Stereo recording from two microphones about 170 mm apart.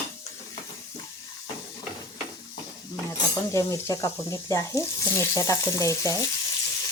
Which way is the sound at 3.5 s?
20° left (ahead or behind).